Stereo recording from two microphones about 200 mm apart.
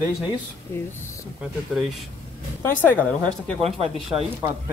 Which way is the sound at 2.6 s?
10° left (ahead or behind).